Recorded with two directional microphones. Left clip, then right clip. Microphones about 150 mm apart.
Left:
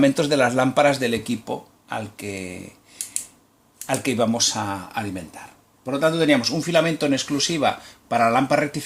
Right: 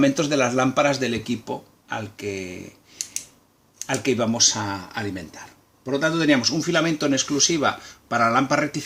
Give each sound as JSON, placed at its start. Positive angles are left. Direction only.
{"t": 0.0, "sound": "speech", "side_deg": 30}